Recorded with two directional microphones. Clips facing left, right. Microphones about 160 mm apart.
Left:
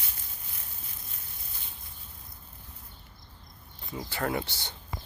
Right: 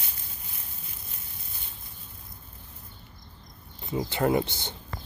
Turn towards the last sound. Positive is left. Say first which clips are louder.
# right 7 dB
turn(degrees=-20)  # may be behind; listen again after turning